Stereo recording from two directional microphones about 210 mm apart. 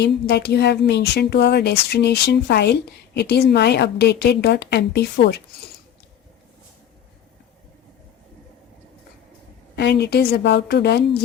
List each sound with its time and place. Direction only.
0.0 s speech: 50° left (ahead or behind)
9.7 s speech: 50° left (ahead or behind)